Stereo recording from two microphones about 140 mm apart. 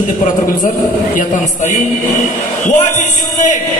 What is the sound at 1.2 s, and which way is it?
A man's voice, 60° left (ahead or behind).